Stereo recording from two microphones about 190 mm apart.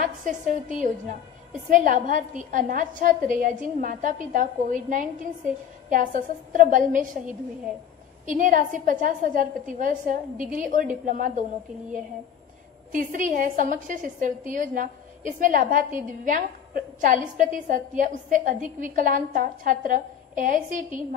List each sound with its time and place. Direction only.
0.0 s a woman's voice: 45° right (ahead or behind)
8.3 s a woman's voice: 45° right (ahead or behind)
12.9 s a woman's voice: 45° right (ahead or behind)